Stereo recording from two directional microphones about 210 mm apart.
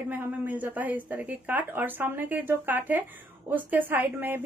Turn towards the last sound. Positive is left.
turn(degrees=-10)  # may be behind; listen again after turning